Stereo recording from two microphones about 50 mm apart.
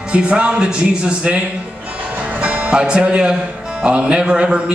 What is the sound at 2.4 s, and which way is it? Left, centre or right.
Speech, right.